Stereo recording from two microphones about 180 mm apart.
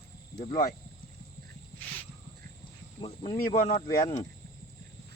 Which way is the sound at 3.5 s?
35° left (ahead or behind).